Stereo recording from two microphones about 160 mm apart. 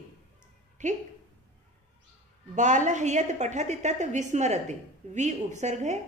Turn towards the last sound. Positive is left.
turn(degrees=-45)  # may be behind; listen again after turning